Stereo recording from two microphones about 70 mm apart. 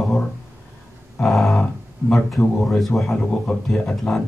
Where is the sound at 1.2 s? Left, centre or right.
Centre.